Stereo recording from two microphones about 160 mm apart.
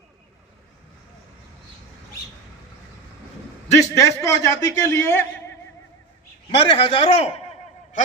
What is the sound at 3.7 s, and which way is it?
A man's voice, 20° left (ahead or behind).